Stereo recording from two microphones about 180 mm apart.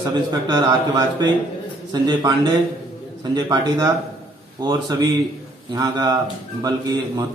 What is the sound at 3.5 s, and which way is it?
A man's voice, 20° right (ahead or behind).